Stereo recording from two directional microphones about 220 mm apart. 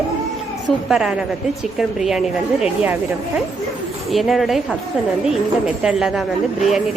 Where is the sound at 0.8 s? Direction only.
Centre (ahead or behind).